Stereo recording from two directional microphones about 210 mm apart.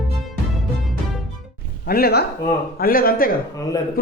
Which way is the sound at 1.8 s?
45° left (ahead or behind).